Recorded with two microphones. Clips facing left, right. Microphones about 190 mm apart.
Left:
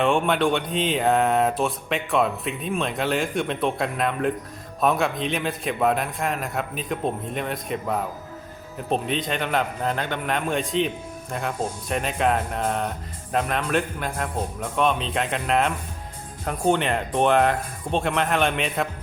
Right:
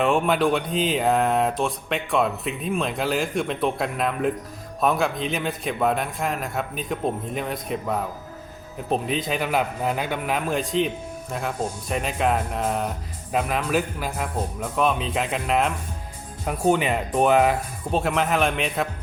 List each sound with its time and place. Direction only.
0.0 s speech: centre (ahead or behind)